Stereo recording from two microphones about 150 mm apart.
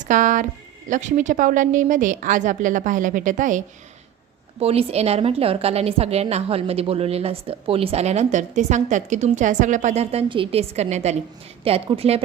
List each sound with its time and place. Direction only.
0.0 s a woman's voice: 60° right (ahead or behind)
4.6 s a woman's voice: 40° right (ahead or behind)